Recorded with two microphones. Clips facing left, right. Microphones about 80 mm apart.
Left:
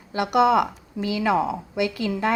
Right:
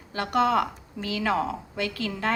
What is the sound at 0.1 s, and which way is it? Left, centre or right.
A woman's voice, centre.